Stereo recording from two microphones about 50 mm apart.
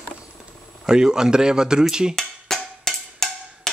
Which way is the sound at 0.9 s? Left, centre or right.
Centre.